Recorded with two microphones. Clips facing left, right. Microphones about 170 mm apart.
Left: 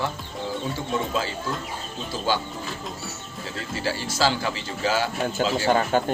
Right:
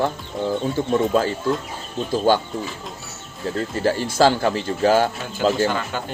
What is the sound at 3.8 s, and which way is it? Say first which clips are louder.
Speech: right 7 dB; 50° right (ahead or behind).